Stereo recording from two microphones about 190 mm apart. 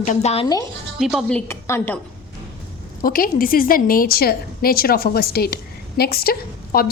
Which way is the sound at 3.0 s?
50° left (ahead or behind).